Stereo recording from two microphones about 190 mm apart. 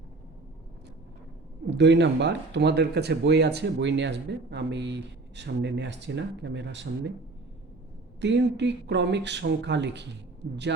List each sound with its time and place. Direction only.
1.7 s speech: 65° right (ahead or behind)
8.2 s speech: 65° right (ahead or behind)